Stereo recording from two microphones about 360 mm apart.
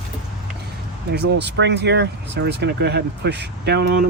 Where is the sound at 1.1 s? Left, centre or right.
Right.